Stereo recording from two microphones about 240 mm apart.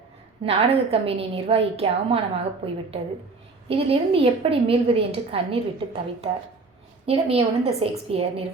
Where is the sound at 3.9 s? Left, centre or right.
Right.